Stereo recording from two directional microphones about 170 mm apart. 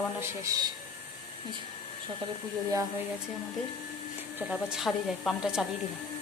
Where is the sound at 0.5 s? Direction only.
20° right (ahead or behind).